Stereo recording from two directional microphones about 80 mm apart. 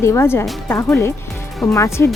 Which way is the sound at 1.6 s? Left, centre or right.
Left.